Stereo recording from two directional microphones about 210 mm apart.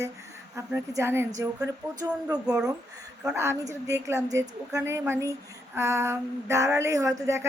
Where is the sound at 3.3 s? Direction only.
10° right (ahead or behind).